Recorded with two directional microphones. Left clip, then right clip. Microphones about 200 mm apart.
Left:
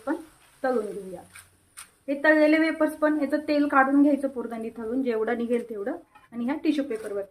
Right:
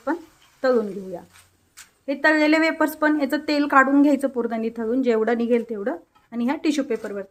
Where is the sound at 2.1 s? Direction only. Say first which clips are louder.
Right 2 dB; 40° right (ahead or behind).